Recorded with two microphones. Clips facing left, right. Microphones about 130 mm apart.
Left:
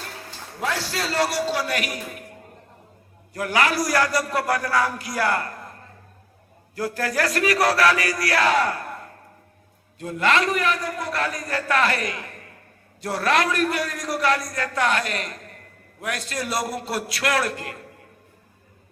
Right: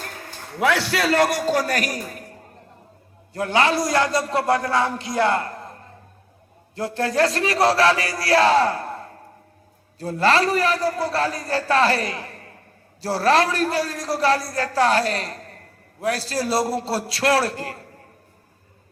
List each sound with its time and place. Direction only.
0.6 s a man's voice: 65° right (ahead or behind); by 2.2 s 40° right (ahead or behind)
3.3 s a man's voice: 25° right (ahead or behind)
6.7 s a man's voice: 25° right (ahead or behind)